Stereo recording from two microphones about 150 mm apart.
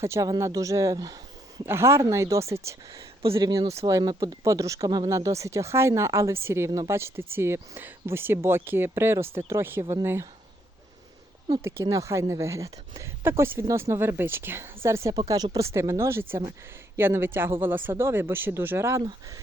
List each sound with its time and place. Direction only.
0.0 s speech: 20° right (ahead or behind)
3.2 s speech: 35° right (ahead or behind)
3.8 s speech: 25° right (ahead or behind)
11.4 s speech: 20° right (ahead or behind)